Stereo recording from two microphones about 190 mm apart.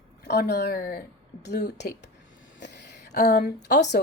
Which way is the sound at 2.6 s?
60° left (ahead or behind).